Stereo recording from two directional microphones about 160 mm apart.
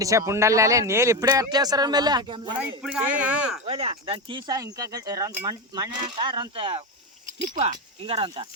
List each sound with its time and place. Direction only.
0.0 s speech: 20° right (ahead or behind)
2.6 s speech: 10° right (ahead or behind)
3.7 s speech: 35° right (ahead or behind)